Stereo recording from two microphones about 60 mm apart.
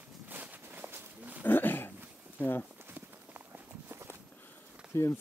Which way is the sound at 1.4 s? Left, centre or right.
Left.